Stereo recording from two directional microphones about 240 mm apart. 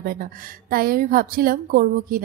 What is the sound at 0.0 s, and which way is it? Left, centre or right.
Speech, right.